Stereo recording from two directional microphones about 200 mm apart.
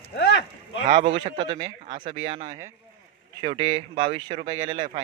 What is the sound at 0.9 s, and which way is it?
Speech, 25° right (ahead or behind).